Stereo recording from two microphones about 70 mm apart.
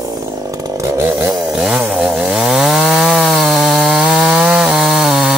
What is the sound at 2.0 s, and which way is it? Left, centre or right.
Chainsaw, centre.